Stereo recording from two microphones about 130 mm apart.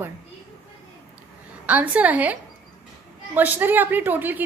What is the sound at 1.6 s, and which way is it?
A woman's voice, 10° right (ahead or behind).